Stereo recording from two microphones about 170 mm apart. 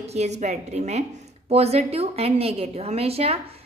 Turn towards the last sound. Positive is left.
turn(degrees=-35)  # may be behind; listen again after turning